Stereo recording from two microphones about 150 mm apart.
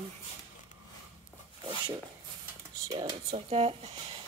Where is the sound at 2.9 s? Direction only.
30° right (ahead or behind).